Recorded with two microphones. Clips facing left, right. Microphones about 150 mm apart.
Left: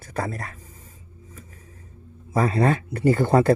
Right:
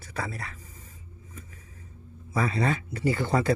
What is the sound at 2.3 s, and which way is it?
Speech, 45° left (ahead or behind).